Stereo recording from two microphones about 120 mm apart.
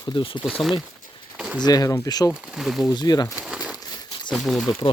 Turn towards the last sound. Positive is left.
turn(degrees=0)  # may be behind; listen again after turning